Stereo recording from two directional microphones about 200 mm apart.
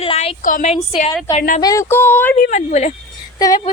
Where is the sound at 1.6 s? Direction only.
15° left (ahead or behind).